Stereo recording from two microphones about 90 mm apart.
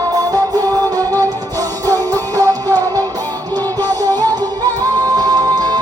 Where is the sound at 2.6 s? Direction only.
25° left (ahead or behind).